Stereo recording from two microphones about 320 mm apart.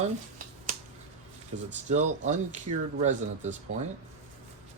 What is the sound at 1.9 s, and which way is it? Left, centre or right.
Speech, right.